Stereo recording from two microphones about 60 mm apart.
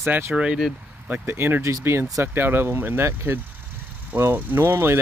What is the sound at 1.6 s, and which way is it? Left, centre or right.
Speech, right.